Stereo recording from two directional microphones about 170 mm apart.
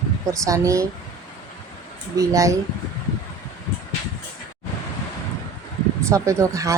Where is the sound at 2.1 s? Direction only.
20° right (ahead or behind).